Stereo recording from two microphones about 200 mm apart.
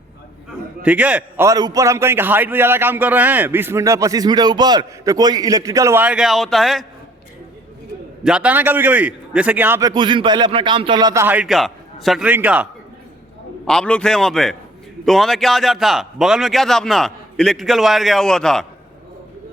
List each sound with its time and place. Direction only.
0.8 s a man's voice: 5° right (ahead or behind)
8.2 s a man's voice: 5° right (ahead or behind)
9.9 s a man's voice: 25° right (ahead or behind); by 12.6 s 10° right (ahead or behind)
13.7 s speech: 5° left (ahead or behind)